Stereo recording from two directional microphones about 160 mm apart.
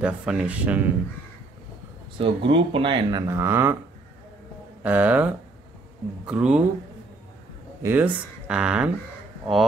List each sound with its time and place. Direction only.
0.0 s speech: 5° right (ahead or behind)
2.1 s speech: 35° right (ahead or behind); by 3.7 s 15° right (ahead or behind)
4.8 s speech: 10° right (ahead or behind)
7.8 s speech: 10° right (ahead or behind)